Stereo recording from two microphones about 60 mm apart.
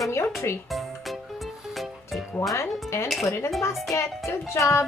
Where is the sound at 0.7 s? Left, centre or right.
Centre.